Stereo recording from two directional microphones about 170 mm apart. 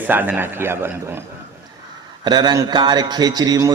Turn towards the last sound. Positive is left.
turn(degrees=-20)  # may be behind; listen again after turning